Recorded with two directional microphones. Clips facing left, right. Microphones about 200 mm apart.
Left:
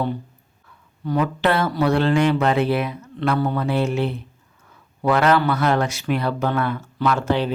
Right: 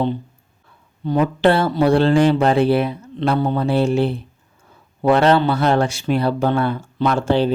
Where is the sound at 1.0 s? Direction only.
30° right (ahead or behind).